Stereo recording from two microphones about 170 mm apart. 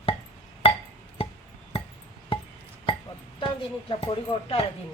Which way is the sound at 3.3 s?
30° left (ahead or behind).